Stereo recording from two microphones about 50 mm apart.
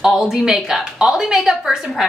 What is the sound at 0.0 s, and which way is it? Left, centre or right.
A woman's voice, centre.